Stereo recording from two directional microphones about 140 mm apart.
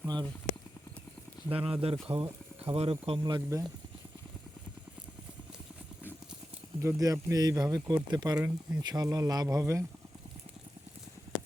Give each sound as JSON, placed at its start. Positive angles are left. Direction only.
{"t": 0.0, "sound": "a sound", "side_deg": -30}
{"t": 1.5, "sound": "speech", "side_deg": -45}
{"t": 6.8, "sound": "speech", "side_deg": -20}
{"t": 8.4, "sound": "speech", "side_deg": -10}
{"t": 8.8, "sound": "speech", "side_deg": -30}